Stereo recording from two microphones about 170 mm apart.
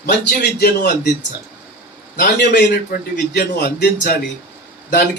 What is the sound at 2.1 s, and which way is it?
Speech, 70° left (ahead or behind).